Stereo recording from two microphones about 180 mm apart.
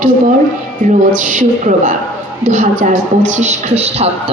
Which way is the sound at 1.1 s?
45° right (ahead or behind).